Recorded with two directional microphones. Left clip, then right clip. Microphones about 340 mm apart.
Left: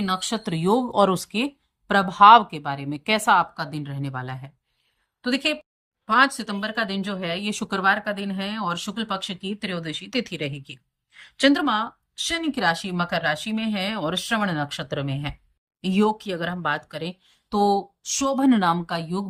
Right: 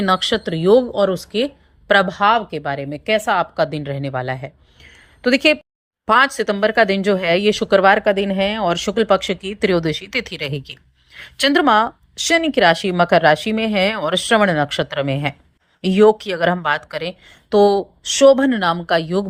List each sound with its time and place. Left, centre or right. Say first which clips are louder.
0.0 s a woman's voice: right 9 dB; centre